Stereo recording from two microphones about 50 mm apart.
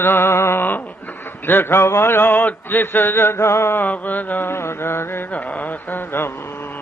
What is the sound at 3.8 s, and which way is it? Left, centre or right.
Mantra, left.